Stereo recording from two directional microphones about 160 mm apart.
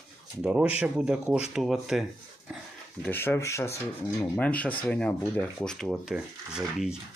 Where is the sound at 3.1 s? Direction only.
15° left (ahead or behind).